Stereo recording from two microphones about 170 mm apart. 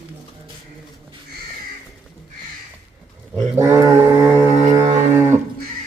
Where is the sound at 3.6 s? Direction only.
20° right (ahead or behind).